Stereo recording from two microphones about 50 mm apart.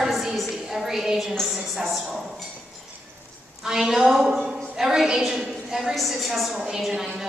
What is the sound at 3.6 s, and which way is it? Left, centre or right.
A woman's voice, centre.